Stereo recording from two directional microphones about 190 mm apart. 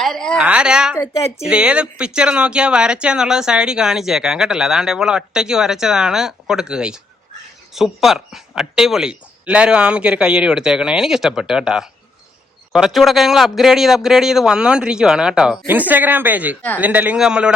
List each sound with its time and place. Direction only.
0.0 s a sound: 5° left (ahead or behind)
1.0 s speech: 30° left (ahead or behind)
1.5 s a man's voice: 5° right (ahead or behind)